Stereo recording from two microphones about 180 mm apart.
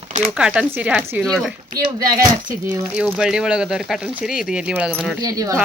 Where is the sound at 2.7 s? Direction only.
5° right (ahead or behind).